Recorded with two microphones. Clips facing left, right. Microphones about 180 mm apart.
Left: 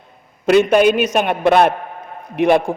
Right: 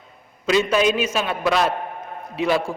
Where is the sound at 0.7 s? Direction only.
60° left (ahead or behind).